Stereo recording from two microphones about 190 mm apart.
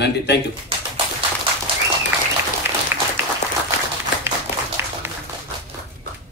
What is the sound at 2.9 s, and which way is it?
Applause, 15° right (ahead or behind).